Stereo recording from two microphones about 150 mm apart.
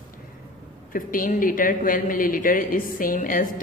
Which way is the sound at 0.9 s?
65° left (ahead or behind).